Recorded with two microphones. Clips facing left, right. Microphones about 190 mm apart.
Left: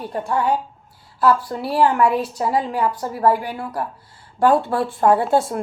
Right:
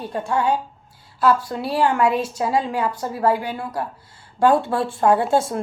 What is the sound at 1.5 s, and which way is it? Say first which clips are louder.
A woman's voice: left 2 dB; 20° right (ahead or behind).